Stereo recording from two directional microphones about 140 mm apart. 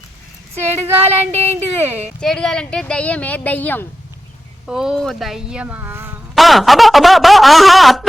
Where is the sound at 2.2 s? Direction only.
5° left (ahead or behind).